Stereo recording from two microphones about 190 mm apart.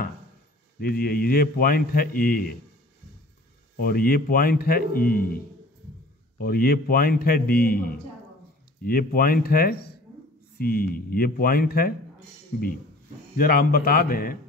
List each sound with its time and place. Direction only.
0.7 s speech: 50° left (ahead or behind)
3.7 s speech: 50° left (ahead or behind)
8.8 s speech: 50° left (ahead or behind)